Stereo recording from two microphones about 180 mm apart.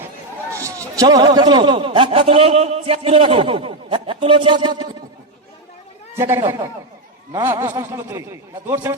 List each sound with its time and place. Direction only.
0.5 s a man's voice: 15° right (ahead or behind)
6.1 s a man's voice: 15° right (ahead or behind)